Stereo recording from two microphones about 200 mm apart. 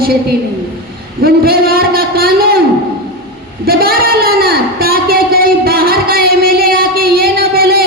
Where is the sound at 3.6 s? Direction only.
50° right (ahead or behind).